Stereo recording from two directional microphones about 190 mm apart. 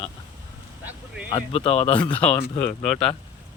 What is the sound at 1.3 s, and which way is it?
Speech, 30° left (ahead or behind).